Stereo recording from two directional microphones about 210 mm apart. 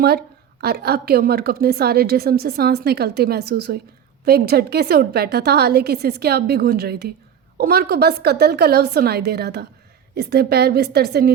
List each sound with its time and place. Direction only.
0.0 s a woman's voice: 50° right (ahead or behind)